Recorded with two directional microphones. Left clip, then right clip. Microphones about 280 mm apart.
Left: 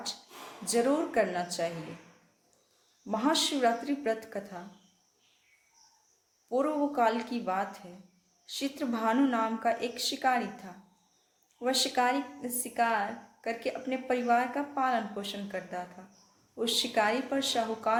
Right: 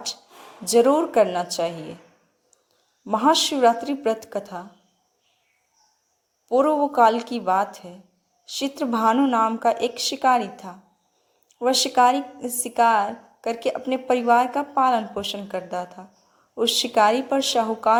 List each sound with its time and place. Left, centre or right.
0.6 s a woman's voice: right
3.1 s a woman's voice: right
6.5 s a woman's voice: right
8.8 s a woman's voice: right
11.6 s a woman's voice: right